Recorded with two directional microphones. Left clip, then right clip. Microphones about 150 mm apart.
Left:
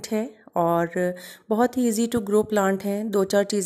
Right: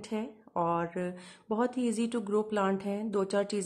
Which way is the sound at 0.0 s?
35° left (ahead or behind).